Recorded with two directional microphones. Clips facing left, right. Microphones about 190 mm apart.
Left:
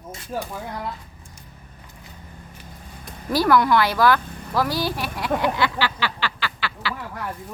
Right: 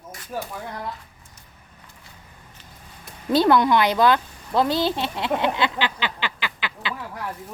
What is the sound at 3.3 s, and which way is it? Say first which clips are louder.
Speech: right 1 dB; 25° right (ahead or behind).